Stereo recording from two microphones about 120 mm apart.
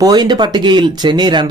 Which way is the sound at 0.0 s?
35° right (ahead or behind).